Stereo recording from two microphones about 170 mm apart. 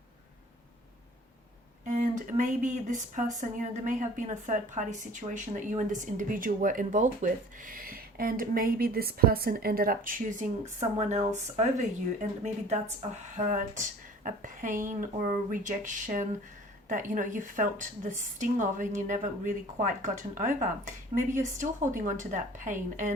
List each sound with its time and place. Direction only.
1.9 s speech: 50° right (ahead or behind)